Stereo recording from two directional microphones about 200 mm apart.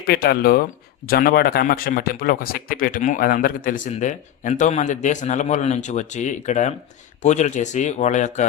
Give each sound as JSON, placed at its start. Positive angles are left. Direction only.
{"t": 0.1, "sound": "a man's voice", "side_deg": 50}